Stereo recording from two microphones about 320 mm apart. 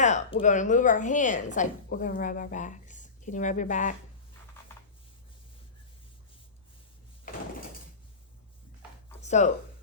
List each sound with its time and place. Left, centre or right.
0.0 s a woman's voice: left
9.2 s speech: left